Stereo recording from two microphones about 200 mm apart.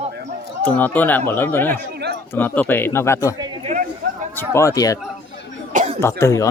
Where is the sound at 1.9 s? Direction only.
55° right (ahead or behind).